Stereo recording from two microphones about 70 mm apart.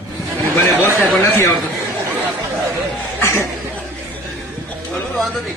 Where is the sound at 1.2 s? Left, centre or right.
Left.